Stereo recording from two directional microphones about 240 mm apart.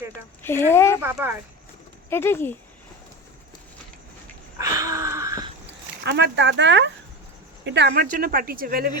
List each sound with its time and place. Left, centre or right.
0.4 s speech: centre
1.0 s speech: centre
2.0 s speech: centre
4.5 s a sound: centre
6.1 s speech: right